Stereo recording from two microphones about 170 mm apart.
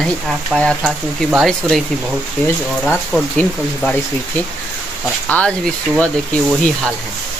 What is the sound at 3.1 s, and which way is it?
Speech, centre (ahead or behind).